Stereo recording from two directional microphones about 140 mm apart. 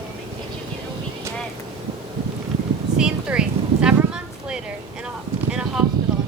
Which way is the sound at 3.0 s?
5° right (ahead or behind).